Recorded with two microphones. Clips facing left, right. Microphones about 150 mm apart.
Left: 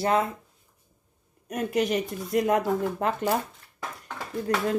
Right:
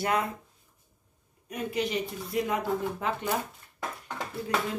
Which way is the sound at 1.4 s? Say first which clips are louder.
Left 5 dB; 45° left (ahead or behind).